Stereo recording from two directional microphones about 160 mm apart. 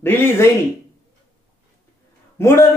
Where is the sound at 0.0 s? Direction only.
15° left (ahead or behind).